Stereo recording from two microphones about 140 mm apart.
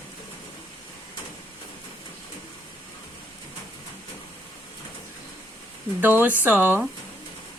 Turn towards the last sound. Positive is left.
turn(degrees=-15)  # may be behind; listen again after turning